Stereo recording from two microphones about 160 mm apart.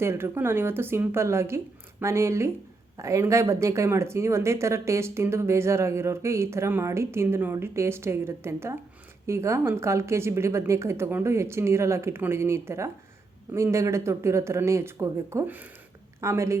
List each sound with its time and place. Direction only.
0.0 s speech: 15° right (ahead or behind)